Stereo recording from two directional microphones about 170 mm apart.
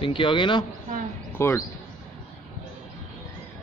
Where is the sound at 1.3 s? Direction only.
15° left (ahead or behind).